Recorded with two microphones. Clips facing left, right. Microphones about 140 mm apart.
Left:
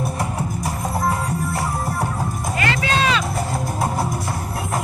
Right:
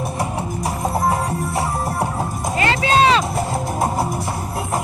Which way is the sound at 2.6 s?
30° right (ahead or behind).